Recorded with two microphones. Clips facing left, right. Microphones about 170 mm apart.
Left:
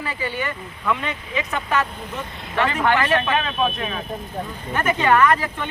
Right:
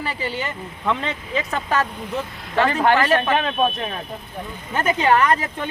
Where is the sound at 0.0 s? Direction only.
30° right (ahead or behind).